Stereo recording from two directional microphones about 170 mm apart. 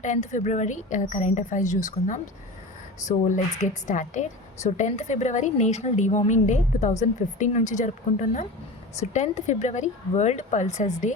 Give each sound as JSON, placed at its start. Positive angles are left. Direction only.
{"t": 0.0, "sound": "a woman's voice", "side_deg": 45}
{"t": 3.2, "sound": "a woman's voice", "side_deg": 50}